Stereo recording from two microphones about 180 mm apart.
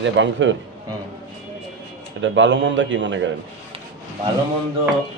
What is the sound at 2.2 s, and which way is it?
A man's voice, 90° right.